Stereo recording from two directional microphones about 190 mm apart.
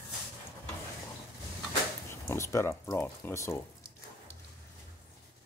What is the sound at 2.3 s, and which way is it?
Speech, 15° left (ahead or behind).